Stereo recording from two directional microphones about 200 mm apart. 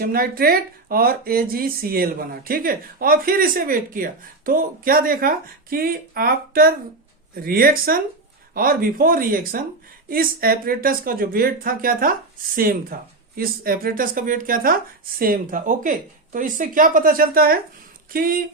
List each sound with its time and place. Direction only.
0.0 s speech: 45° right (ahead or behind)